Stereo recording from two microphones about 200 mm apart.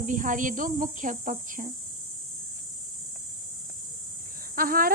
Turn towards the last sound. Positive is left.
turn(degrees=-45)  # may be behind; listen again after turning